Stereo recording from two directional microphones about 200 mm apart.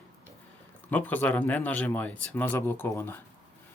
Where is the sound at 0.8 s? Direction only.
10° left (ahead or behind).